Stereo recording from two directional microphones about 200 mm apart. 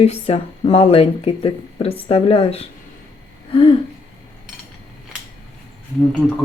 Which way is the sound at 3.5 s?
25° left (ahead or behind).